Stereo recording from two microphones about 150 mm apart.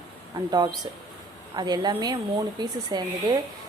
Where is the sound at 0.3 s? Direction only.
25° right (ahead or behind).